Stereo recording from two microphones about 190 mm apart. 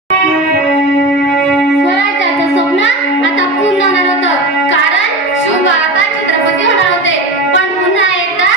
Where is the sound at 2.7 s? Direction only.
75° left (ahead or behind).